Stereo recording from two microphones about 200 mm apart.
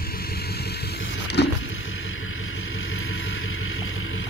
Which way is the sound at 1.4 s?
55° left (ahead or behind).